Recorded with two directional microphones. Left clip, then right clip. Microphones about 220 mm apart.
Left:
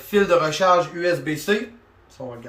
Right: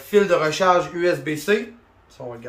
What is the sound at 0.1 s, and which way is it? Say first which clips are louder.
Speech: right 1 dB; 5° right (ahead or behind).